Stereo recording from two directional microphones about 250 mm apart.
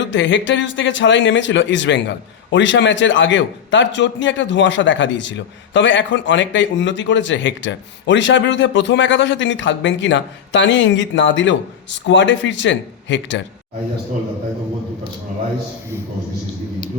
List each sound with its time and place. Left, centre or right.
0.0 s a man's voice: left